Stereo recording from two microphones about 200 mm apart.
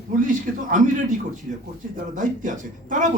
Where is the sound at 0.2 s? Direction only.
40° right (ahead or behind).